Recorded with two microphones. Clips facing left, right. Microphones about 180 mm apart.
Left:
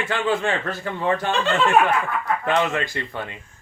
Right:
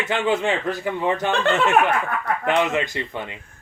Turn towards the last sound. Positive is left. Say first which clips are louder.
# right 2 dB
turn(degrees=-20)  # may be behind; listen again after turning